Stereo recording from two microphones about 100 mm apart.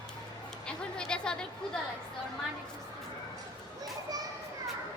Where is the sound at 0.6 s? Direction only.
10° left (ahead or behind).